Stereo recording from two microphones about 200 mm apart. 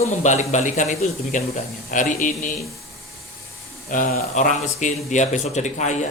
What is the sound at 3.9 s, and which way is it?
A man's voice, 40° left (ahead or behind).